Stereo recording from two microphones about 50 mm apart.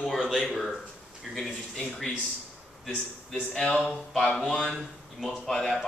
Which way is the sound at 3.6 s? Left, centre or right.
Left.